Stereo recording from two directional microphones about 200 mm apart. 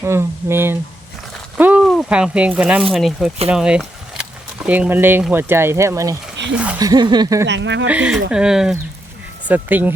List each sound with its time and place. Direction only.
0.0 s speech: 10° right (ahead or behind)
6.4 s speech: 60° right (ahead or behind)
6.7 s speech: 20° right (ahead or behind)
7.4 s speech: 65° right (ahead or behind)
7.9 s speech: 5° right (ahead or behind)